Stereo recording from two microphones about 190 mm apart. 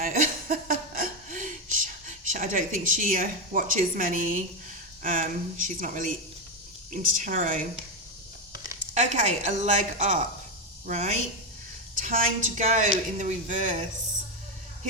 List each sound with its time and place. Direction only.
0.0 s a sound: 45° right (ahead or behind)
5.0 s speech: 45° right (ahead or behind)
9.0 s speech: 40° right (ahead or behind)